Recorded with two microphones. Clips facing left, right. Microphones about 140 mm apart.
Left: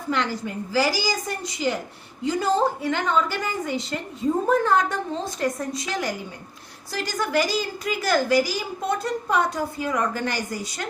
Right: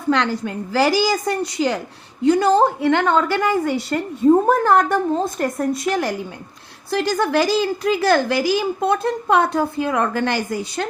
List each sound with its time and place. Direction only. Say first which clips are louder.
0.1 s a woman's voice: right 6 dB; 70° right (ahead or behind)